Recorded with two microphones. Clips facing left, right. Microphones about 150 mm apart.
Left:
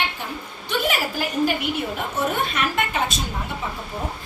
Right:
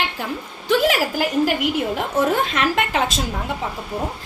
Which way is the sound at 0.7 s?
90° right.